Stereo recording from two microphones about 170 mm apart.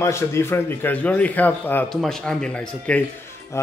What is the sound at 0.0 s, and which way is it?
A man's voice, 15° left (ahead or behind).